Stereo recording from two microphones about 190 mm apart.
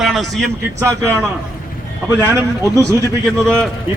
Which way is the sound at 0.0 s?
Centre (ahead or behind).